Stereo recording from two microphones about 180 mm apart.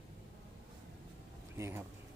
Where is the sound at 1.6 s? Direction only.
15° right (ahead or behind).